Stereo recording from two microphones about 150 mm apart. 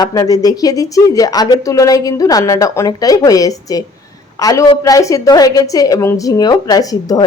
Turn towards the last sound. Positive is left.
turn(degrees=25)  # may be behind; listen again after turning